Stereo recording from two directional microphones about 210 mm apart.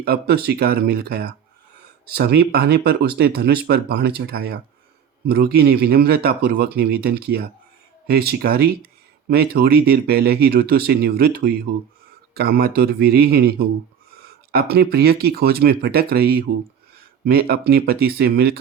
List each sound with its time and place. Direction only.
0.0 s speech: 45° right (ahead or behind)